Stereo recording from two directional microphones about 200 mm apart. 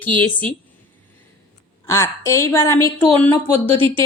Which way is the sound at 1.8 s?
15° left (ahead or behind).